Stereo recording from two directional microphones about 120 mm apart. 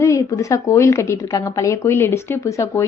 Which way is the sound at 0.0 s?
25° left (ahead or behind).